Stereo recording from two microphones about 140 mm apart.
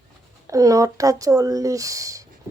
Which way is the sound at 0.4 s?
25° right (ahead or behind).